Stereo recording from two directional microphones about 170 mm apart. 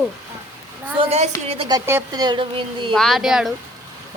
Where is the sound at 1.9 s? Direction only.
20° right (ahead or behind).